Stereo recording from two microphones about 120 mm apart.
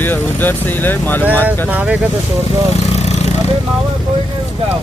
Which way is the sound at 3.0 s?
60° left (ahead or behind).